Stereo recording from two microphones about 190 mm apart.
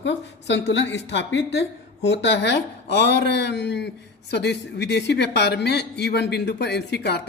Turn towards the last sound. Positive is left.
turn(degrees=60)  # may be behind; listen again after turning